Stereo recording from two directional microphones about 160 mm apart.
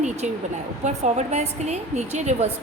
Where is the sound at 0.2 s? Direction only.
45° right (ahead or behind).